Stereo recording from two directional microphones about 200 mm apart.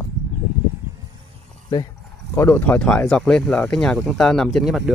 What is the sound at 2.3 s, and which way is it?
Speech, 10° left (ahead or behind).